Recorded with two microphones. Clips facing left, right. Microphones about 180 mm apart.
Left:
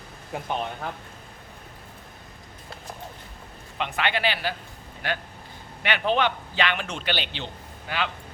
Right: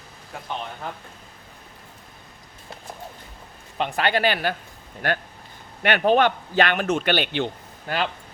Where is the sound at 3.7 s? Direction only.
40° right (ahead or behind).